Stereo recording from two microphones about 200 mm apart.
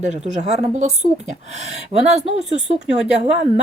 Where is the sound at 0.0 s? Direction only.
35° right (ahead or behind).